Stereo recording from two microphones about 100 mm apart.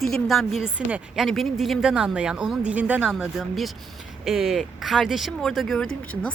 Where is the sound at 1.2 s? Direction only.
Centre (ahead or behind).